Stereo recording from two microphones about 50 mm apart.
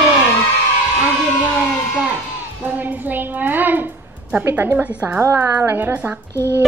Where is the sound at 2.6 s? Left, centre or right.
Right.